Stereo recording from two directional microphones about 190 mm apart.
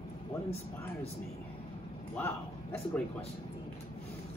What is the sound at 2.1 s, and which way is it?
Speech, 10° left (ahead or behind).